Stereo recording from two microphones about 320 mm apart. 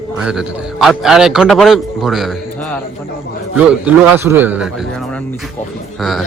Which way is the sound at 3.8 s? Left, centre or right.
Centre.